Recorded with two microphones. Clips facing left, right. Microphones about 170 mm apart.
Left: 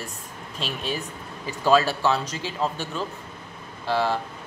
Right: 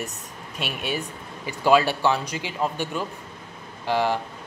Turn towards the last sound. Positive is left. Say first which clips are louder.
# right 1 dB
turn(degrees=-15)  # may be behind; listen again after turning